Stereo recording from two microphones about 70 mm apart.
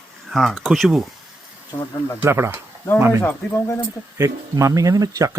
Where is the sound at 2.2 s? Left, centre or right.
Right.